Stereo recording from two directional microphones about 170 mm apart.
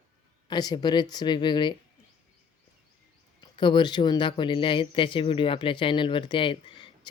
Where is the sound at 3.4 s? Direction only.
30° left (ahead or behind).